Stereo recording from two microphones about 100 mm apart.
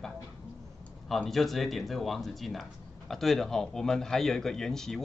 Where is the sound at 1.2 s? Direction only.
5° left (ahead or behind).